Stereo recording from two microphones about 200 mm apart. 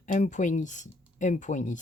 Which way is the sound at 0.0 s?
40° left (ahead or behind).